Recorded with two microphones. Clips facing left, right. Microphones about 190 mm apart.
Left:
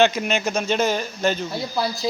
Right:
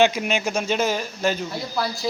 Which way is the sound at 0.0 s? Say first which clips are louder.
Left 1 dB; 10° right (ahead or behind).